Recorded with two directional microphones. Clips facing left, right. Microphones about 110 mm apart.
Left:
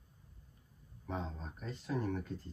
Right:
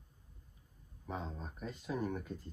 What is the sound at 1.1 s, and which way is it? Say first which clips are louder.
Speech: left 1 dB; 5° right (ahead or behind).